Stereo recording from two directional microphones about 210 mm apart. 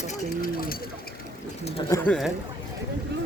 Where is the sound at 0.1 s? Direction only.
45° left (ahead or behind).